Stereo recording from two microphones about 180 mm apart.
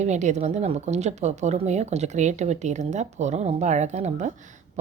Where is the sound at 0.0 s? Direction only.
40° right (ahead or behind).